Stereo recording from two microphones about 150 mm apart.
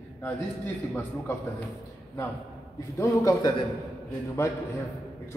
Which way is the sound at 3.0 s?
20° left (ahead or behind).